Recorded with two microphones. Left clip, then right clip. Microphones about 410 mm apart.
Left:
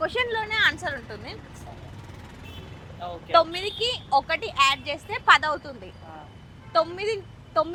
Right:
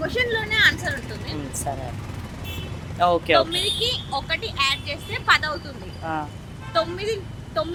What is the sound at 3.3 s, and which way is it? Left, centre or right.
A woman's voice, left.